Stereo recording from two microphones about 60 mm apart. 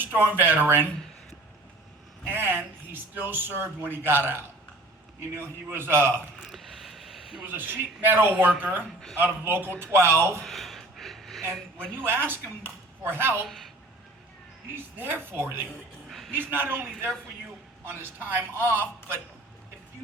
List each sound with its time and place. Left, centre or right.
0.0 s speech: right
2.3 s speech: right
5.6 s speech: right
6.5 s a sound: centre
7.4 s speech: right
9.8 s speech: right
10.4 s a sound: centre
12.0 s speech: right
13.4 s a woman's voice: centre
14.8 s speech: right
16.0 s a sound: centre
16.3 s speech: right